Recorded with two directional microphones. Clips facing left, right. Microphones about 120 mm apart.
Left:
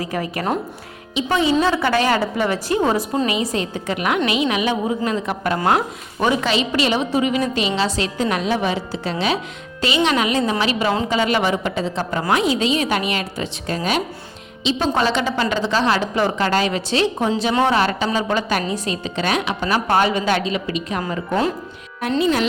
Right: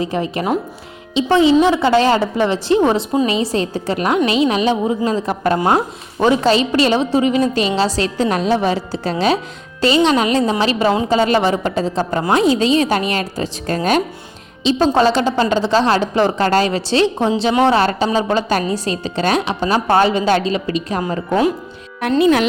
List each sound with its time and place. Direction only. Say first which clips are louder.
0.0 s a woman's voice: right 4 dB; 25° right (ahead or behind)
5.5 s a woman's voice: right 3 dB; 20° right (ahead or behind)
6.5 s a woman's voice: right 5 dB; 35° right (ahead or behind)
22.2 s speech: right 6 dB; 60° right (ahead or behind)